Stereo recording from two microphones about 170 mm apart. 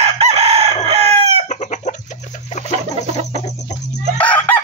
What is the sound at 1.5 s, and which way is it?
Chicken, 40° left (ahead or behind).